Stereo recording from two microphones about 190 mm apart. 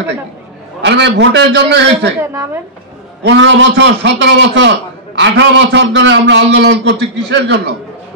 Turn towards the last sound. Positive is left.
turn(degrees=-65)  # may be behind; listen again after turning